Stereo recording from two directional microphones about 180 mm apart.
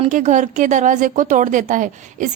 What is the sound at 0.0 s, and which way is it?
Speech, 40° right (ahead or behind).